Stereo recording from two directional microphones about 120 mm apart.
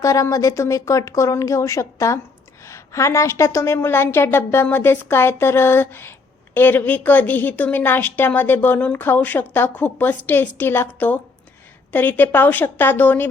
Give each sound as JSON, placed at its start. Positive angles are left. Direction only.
{"t": 0.0, "sound": "a woman's voice", "side_deg": 25}